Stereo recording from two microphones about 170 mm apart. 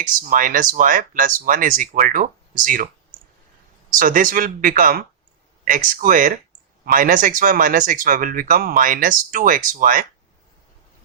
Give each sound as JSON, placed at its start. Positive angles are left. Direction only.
{"t": 0.0, "sound": "speech", "side_deg": -55}
{"t": 3.9, "sound": "speech", "side_deg": -55}